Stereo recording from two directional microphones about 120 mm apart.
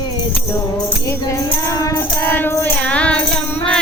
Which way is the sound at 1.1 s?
25° left (ahead or behind).